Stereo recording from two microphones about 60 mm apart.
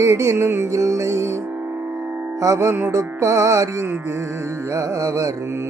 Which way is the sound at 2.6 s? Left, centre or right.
Right.